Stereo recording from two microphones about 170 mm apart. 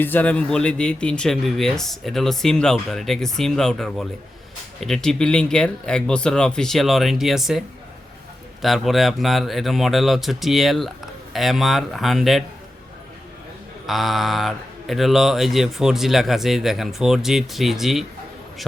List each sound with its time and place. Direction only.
0.0 s speech: 10° left (ahead or behind)
8.6 s speech: centre (ahead or behind)
13.8 s speech: centre (ahead or behind)